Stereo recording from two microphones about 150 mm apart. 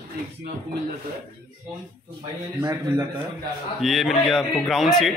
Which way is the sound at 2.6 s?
30° right (ahead or behind).